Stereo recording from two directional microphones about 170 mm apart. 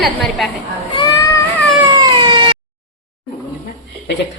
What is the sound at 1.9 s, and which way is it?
Cat, 25° right (ahead or behind).